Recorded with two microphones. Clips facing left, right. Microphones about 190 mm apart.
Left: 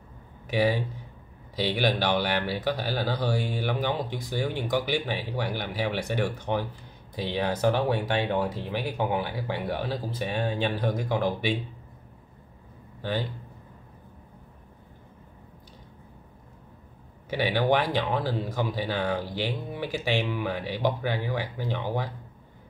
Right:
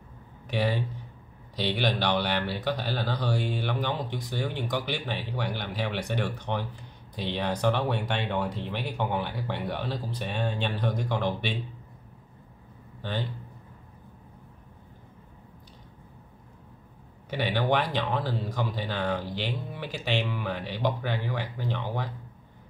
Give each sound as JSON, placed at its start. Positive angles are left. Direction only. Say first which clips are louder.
{"t": 0.5, "sound": "speech", "louder": "left 3 dB", "side_deg": 10}
{"t": 17.3, "sound": "speech", "louder": "left 2 dB", "side_deg": 10}